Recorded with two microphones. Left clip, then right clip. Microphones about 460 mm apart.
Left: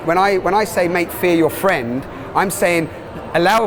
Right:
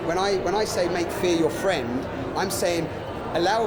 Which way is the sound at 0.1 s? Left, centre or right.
Left.